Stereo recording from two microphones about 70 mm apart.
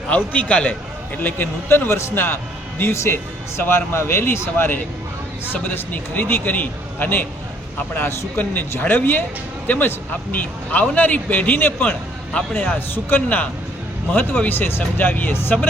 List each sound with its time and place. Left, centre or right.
0.1 s a man's voice: left
1.2 s a man's voice: left
8.4 s a man's voice: left